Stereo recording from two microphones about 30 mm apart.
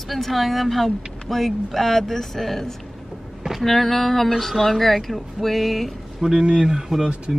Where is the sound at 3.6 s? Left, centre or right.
Centre.